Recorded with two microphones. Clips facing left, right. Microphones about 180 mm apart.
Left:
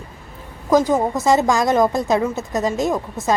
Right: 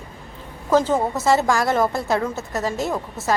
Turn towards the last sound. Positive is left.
turn(degrees=15)  # may be behind; listen again after turning